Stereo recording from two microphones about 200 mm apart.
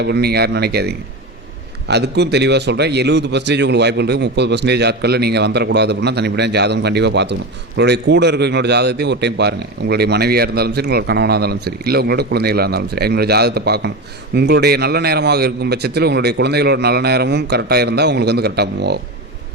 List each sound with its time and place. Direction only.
0.0 s a man's voice: 55° right (ahead or behind)